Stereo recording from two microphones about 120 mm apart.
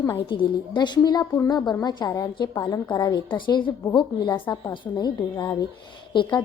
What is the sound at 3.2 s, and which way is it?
A woman's voice, 40° left (ahead or behind).